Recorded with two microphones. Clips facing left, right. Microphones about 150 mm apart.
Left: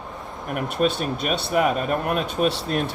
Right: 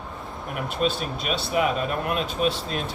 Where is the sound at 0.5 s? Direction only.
50° left (ahead or behind).